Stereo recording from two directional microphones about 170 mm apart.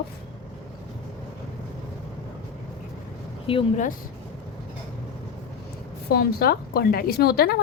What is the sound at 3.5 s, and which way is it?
Speech, 30° left (ahead or behind).